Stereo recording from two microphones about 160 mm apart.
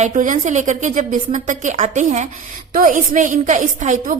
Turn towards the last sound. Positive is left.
turn(degrees=-55)  # may be behind; listen again after turning